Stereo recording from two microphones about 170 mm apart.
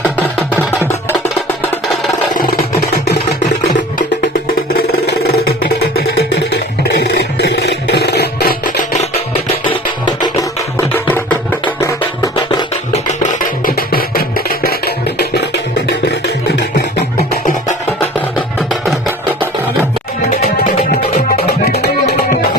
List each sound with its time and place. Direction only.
2.4 s a sound: 60° left (ahead or behind)
4.7 s music: 60° left (ahead or behind)
9.3 s music: 30° left (ahead or behind)
10.8 s music: 10° left (ahead or behind)
11.8 s music: 25° left (ahead or behind)
13.7 s music: 60° left (ahead or behind)
17.3 s music: 55° left (ahead or behind)
21.3 s music: 70° left (ahead or behind)